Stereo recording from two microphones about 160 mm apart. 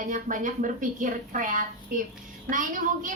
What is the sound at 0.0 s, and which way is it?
A woman's voice, 55° right (ahead or behind).